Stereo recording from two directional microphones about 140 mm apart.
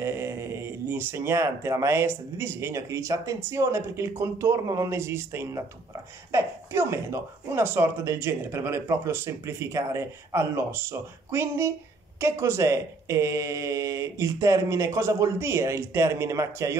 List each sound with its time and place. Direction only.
0.0 s speech: 20° right (ahead or behind)